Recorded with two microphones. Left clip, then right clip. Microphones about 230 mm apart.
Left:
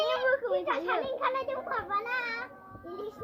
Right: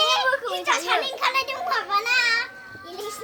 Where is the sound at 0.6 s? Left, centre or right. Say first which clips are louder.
Right 8 dB; right.